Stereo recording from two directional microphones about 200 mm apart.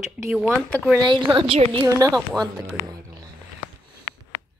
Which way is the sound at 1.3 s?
25° right (ahead or behind).